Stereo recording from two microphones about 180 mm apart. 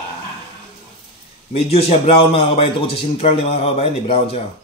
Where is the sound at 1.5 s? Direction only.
35° left (ahead or behind).